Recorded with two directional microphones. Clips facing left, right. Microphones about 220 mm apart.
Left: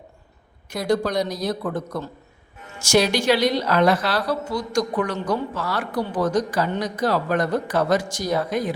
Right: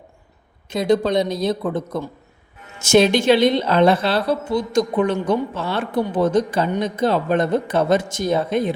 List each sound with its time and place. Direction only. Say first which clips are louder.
0.7 s a woman's voice: right 4 dB; 20° right (ahead or behind)